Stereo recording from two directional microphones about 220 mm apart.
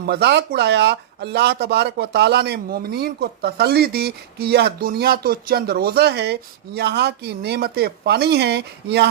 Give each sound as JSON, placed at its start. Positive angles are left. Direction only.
{"t": 0.0, "sound": "speech", "side_deg": -45}